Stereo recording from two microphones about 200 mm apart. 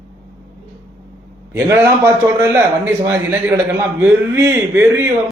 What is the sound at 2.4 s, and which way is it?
A man's voice, 10° right (ahead or behind).